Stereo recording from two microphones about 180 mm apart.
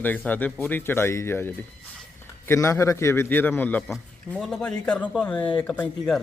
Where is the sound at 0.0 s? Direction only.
10° left (ahead or behind).